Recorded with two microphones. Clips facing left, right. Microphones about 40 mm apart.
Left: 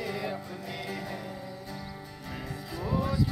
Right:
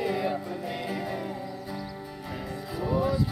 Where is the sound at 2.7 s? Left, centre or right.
Centre.